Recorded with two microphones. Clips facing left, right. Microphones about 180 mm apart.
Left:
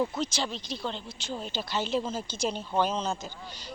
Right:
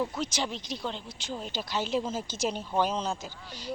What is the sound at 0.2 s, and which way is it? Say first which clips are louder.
A woman's voice: left 1 dB; 15° right (ahead or behind).